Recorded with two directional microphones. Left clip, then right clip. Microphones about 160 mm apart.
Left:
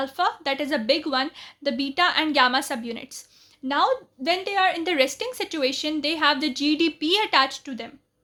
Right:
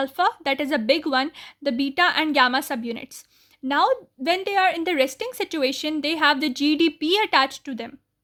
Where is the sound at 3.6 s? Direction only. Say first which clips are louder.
Right 2 dB; 50° right (ahead or behind).